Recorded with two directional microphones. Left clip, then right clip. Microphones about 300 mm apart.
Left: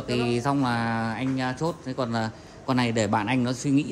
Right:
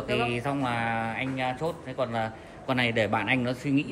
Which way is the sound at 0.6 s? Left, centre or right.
Left.